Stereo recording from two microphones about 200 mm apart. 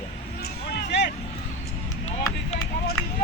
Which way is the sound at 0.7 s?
60° left (ahead or behind).